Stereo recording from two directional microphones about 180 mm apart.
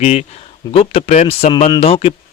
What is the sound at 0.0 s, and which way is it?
Speech, 35° left (ahead or behind).